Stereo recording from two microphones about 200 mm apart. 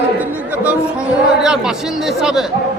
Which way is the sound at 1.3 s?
Centre (ahead or behind).